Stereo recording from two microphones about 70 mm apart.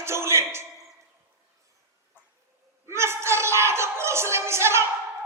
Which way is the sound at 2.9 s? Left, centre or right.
Right.